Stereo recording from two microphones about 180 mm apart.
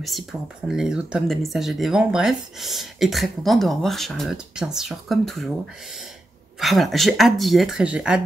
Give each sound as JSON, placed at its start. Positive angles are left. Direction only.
{"t": 0.0, "sound": "speech", "side_deg": 0}
{"t": 6.6, "sound": "speech", "side_deg": 0}